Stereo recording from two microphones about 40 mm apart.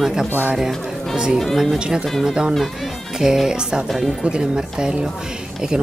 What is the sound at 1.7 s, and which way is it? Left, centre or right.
Speech, centre.